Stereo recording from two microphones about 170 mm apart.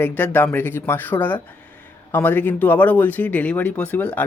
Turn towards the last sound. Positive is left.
turn(degrees=10)  # may be behind; listen again after turning